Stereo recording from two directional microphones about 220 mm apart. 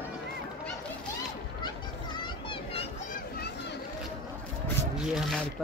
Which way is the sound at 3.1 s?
45° left (ahead or behind).